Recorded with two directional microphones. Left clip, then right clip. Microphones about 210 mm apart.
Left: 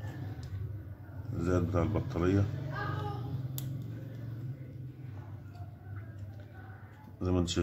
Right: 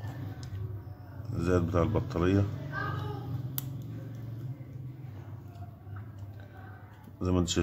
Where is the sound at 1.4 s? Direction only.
15° right (ahead or behind).